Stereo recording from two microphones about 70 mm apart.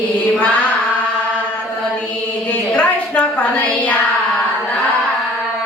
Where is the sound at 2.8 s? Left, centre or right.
Left.